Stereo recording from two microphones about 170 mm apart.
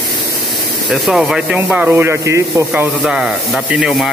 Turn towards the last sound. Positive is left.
turn(degrees=-5)  # may be behind; listen again after turning